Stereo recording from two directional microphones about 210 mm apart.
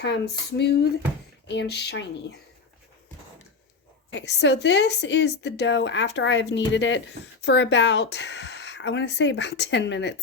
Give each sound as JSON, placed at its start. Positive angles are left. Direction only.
{"t": 0.0, "sound": "speech", "side_deg": 55}
{"t": 4.1, "sound": "a woman's voice", "side_deg": 55}